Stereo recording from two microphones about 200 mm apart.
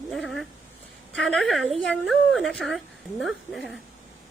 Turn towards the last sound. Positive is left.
turn(degrees=0)  # may be behind; listen again after turning